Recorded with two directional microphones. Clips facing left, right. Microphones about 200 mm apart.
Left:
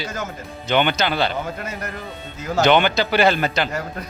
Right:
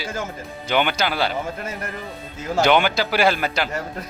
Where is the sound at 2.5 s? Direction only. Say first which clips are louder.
Left 1 dB; 10° right (ahead or behind).